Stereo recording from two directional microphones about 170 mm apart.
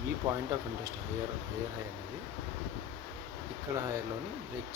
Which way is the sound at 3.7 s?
20° right (ahead or behind).